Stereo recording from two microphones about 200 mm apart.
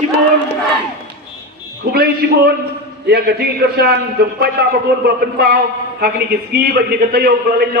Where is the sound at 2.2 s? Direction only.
55° right (ahead or behind).